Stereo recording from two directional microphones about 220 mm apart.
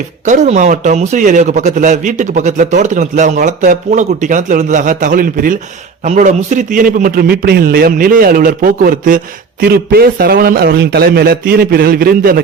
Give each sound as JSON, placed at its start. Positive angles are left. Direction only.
{"t": 0.3, "sound": "a man's voice", "side_deg": -35}